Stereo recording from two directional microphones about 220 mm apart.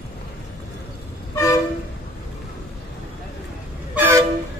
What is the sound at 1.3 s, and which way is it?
Train, 15° left (ahead or behind).